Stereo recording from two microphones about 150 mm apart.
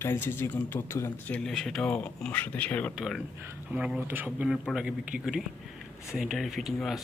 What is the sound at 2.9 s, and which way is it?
Speech, centre (ahead or behind).